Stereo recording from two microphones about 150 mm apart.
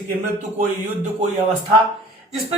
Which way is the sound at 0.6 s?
55° right (ahead or behind).